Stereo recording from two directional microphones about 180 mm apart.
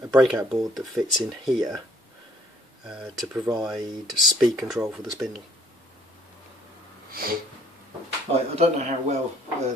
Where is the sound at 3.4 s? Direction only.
20° right (ahead or behind).